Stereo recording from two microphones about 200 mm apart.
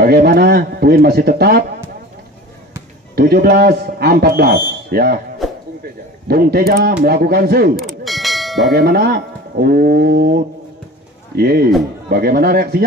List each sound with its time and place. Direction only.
0.0 s speech: 50° right (ahead or behind)
3.2 s speech: 50° right (ahead or behind)
6.2 s speech: 50° right (ahead or behind)
7.7 s clang: centre (ahead or behind)
8.7 s speech: 50° right (ahead or behind)